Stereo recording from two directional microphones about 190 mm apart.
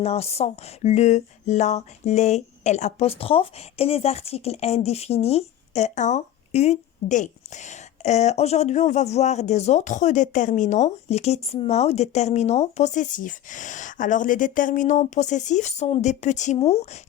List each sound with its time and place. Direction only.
0.0 s speech: 35° left (ahead or behind)